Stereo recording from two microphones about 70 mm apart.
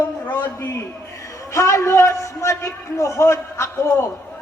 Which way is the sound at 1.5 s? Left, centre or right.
Left.